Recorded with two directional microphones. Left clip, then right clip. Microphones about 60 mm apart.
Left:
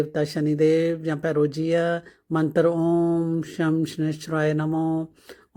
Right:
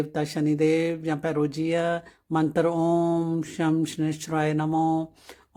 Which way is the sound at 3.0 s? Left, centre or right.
Centre.